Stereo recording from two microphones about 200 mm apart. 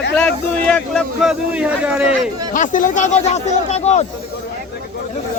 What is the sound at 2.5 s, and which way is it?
Speech, 40° left (ahead or behind).